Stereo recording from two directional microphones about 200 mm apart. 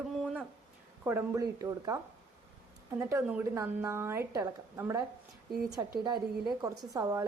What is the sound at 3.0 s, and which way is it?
A woman's voice, 15° right (ahead or behind).